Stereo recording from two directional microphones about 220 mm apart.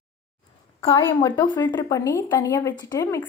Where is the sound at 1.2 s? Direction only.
15° left (ahead or behind).